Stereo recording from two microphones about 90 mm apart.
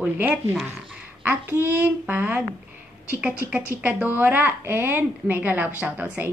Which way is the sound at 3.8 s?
20° right (ahead or behind).